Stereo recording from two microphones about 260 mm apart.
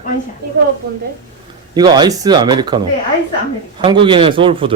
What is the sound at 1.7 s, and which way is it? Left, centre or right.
Speech, centre.